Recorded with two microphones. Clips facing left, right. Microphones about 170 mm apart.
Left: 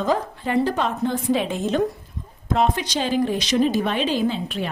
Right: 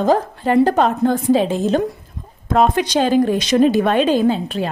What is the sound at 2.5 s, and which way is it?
Speech, 50° right (ahead or behind).